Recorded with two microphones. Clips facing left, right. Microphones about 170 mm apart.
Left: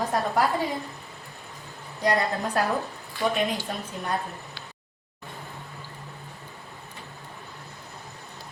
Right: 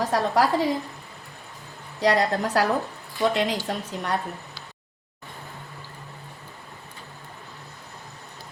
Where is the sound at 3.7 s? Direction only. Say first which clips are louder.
Right 4 dB; 75° right (ahead or behind).